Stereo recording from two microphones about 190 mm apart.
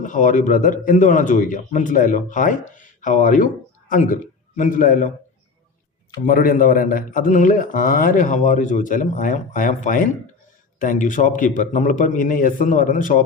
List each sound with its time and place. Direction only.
0.0 s a man's voice: 40° left (ahead or behind)
6.2 s a man's voice: 45° left (ahead or behind)